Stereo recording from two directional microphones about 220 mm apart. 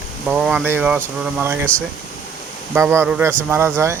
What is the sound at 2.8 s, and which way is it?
Speech, 10° right (ahead or behind).